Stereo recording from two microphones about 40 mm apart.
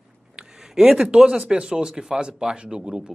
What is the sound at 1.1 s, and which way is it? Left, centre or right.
Speech, centre.